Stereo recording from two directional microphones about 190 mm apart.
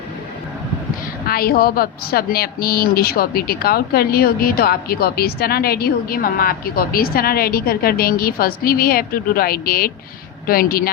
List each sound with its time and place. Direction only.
1.3 s a woman's voice: 50° left (ahead or behind)